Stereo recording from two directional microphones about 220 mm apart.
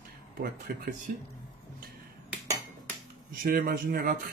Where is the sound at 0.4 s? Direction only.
45° right (ahead or behind).